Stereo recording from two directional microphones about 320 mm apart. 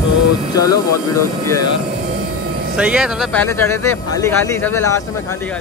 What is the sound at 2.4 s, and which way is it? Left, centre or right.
Vehicle, right.